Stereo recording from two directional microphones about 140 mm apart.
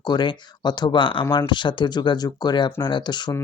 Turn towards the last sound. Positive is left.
turn(degrees=30)  # may be behind; listen again after turning